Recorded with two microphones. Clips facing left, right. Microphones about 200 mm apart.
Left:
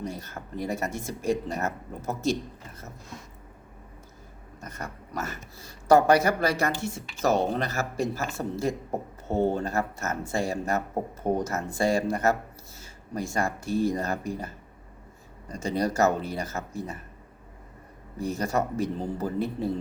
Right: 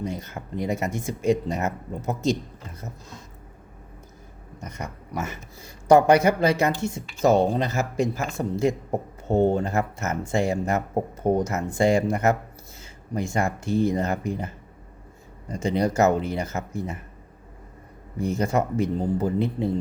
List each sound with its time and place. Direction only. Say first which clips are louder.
0.0 s speech: right 4 dB; 20° right (ahead or behind)
4.6 s speech: right 3 dB; 20° right (ahead or behind)
18.2 s speech: right 4 dB; 20° right (ahead or behind)